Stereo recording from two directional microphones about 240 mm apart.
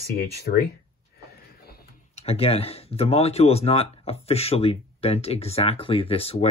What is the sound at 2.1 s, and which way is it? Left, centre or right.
Speech, left.